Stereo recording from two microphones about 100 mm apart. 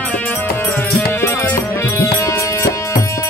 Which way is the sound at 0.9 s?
25° left (ahead or behind).